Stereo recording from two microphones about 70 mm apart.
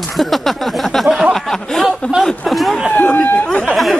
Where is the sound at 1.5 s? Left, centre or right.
Centre.